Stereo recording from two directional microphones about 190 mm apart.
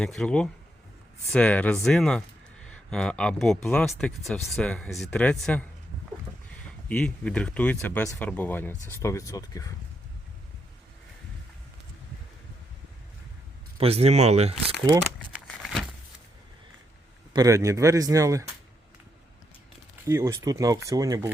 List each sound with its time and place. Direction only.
0.0 s speech: centre (ahead or behind)
6.8 s speech: 5° left (ahead or behind)
13.7 s speech: 30° right (ahead or behind)
15.6 s a sound: centre (ahead or behind)
17.3 s speech: 15° right (ahead or behind)
20.1 s speech: 15° right (ahead or behind)